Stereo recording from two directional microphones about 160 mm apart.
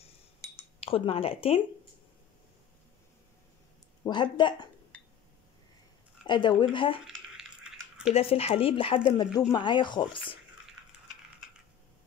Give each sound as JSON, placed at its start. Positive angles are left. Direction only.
{"t": 0.7, "sound": "speech", "side_deg": 35}
{"t": 4.0, "sound": "speech", "side_deg": 30}
{"t": 4.9, "sound": "a sound", "side_deg": 10}
{"t": 6.2, "sound": "speech", "side_deg": 30}
{"t": 7.1, "sound": "a sound", "side_deg": -5}
{"t": 8.1, "sound": "speech", "side_deg": 40}